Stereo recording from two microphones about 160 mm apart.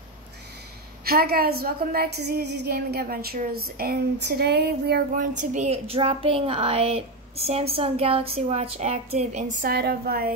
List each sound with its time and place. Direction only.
1.0 s a woman's voice: 75° right (ahead or behind)
3.3 s a sound: 70° right (ahead or behind); by 9.4 s 45° right (ahead or behind)
9.6 s a woman's voice: 75° right (ahead or behind)